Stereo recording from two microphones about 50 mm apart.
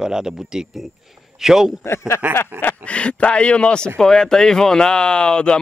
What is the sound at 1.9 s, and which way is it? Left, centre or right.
Speech, left.